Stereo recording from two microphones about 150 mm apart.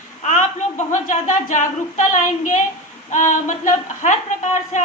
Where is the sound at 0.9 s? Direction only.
55° left (ahead or behind).